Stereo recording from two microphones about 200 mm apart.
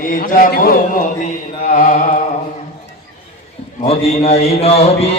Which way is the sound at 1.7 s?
40° left (ahead or behind).